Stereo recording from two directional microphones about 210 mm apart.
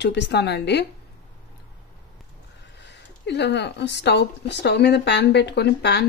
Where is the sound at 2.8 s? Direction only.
55° left (ahead or behind).